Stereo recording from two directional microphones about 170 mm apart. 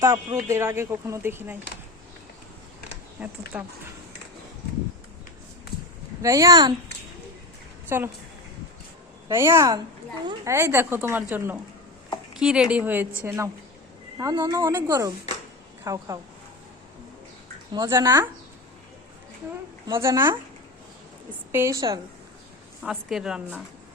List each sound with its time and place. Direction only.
0.0 s speech: 20° right (ahead or behind)
3.2 s a woman's voice: 5° right (ahead or behind)
6.2 s speech: 20° right (ahead or behind)
7.9 s a woman's voice: 10° right (ahead or behind)
9.3 s a woman's voice: 15° right (ahead or behind)
17.7 s speech: 20° right (ahead or behind)
20.0 s a woman's voice: 15° right (ahead or behind)
22.8 s a woman's voice: centre (ahead or behind)